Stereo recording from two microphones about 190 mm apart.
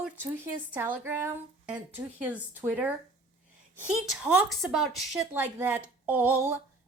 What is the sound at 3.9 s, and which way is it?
A woman's voice, 5° right (ahead or behind).